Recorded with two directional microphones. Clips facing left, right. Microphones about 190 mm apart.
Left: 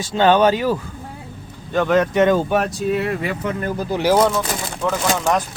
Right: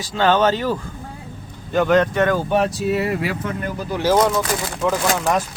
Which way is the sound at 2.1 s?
20° left (ahead or behind).